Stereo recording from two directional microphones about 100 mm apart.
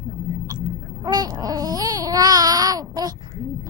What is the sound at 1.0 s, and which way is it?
Babbling, 40° right (ahead or behind).